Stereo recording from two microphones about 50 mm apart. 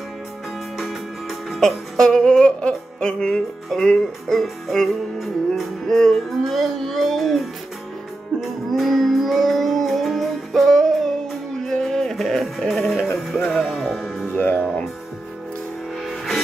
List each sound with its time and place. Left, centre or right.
1.6 s music: centre
6.3 s speech: centre
8.4 s music: centre
14.3 s music: left